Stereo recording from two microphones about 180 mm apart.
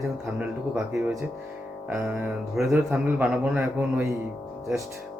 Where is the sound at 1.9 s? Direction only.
15° right (ahead or behind).